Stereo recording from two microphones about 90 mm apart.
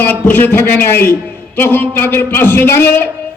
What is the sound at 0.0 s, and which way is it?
A man's voice, 20° left (ahead or behind).